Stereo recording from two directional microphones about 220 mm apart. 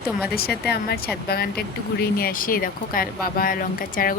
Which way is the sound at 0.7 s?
45° left (ahead or behind).